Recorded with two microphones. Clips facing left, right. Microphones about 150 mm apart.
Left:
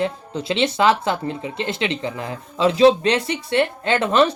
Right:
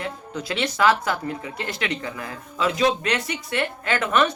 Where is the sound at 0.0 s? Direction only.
25° left (ahead or behind).